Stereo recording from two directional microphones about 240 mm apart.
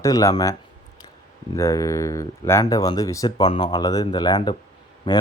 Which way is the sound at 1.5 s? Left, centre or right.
Centre.